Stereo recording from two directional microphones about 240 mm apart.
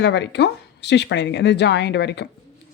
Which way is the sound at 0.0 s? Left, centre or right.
Left.